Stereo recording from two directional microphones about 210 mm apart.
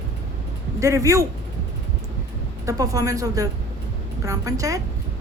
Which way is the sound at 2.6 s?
15° right (ahead or behind).